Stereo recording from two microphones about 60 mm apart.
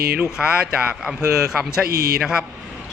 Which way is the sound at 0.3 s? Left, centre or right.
Centre.